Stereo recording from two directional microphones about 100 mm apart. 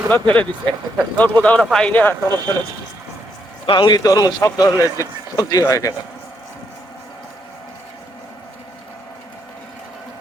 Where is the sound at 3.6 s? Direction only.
50° left (ahead or behind); by 5.9 s 35° left (ahead or behind).